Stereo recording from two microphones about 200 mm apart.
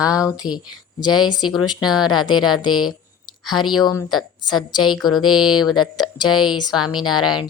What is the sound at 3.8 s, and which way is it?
Speech, 20° left (ahead or behind).